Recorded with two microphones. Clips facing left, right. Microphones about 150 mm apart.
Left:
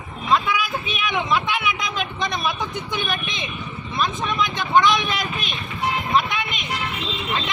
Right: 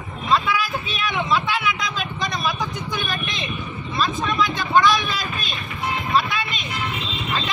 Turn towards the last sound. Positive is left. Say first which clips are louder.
# even
turn(degrees=20)  # may be behind; listen again after turning